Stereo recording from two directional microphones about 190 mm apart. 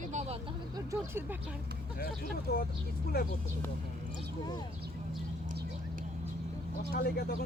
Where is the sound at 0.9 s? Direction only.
10° right (ahead or behind).